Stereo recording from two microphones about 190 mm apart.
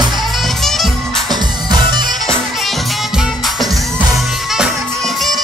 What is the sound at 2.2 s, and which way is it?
Music, centre (ahead or behind).